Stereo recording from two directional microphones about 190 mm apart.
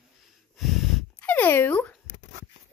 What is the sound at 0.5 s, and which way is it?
Snort, centre (ahead or behind).